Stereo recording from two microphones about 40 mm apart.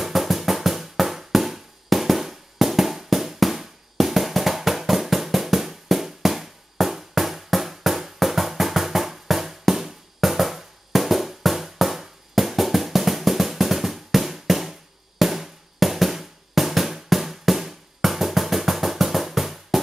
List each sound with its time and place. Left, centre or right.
0.0 s music: centre